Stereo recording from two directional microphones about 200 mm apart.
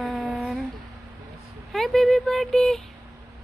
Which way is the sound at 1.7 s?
Centre (ahead or behind).